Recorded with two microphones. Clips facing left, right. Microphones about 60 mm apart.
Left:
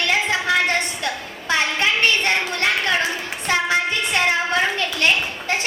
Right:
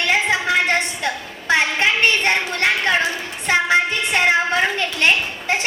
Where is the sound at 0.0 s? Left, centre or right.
Right.